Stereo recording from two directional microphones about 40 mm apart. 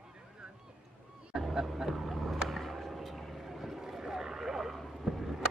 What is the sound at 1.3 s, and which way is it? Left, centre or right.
Hubbub, centre.